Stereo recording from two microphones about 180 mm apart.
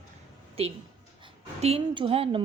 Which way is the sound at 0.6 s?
35° right (ahead or behind).